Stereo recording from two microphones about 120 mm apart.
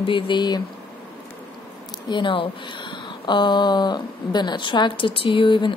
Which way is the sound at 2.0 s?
40° left (ahead or behind).